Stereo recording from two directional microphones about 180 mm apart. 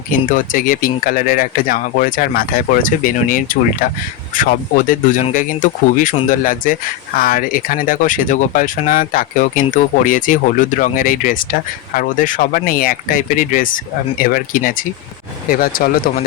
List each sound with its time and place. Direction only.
0.3 s speech: 50° left (ahead or behind)